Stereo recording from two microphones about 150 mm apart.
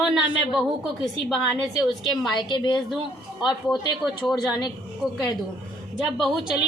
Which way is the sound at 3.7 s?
Centre (ahead or behind).